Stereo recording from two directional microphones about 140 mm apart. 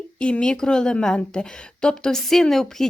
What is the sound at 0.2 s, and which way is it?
A woman's voice, 10° left (ahead or behind).